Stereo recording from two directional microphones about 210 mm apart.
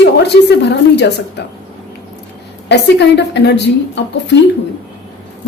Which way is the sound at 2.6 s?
55° left (ahead or behind).